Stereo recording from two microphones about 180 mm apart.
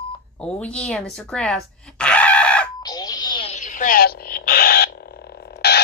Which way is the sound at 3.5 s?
45° left (ahead or behind).